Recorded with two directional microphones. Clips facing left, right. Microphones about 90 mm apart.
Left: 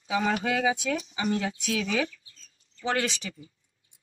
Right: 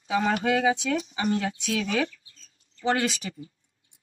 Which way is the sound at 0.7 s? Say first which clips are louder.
Right 3 dB; 10° left (ahead or behind).